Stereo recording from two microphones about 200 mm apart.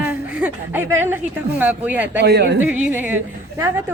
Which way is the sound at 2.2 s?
55° right (ahead or behind).